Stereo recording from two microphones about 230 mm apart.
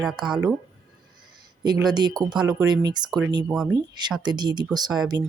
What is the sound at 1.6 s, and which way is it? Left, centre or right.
Speech, centre.